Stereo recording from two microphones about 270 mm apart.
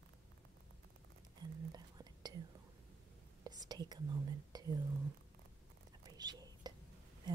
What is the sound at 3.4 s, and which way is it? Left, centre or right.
Whispering, centre.